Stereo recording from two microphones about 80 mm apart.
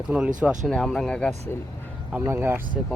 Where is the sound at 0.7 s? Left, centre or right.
Centre.